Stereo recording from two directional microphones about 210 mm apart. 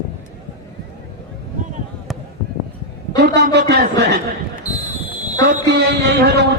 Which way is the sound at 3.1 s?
55° right (ahead or behind).